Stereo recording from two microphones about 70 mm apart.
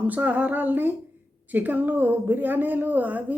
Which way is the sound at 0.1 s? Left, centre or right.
Right.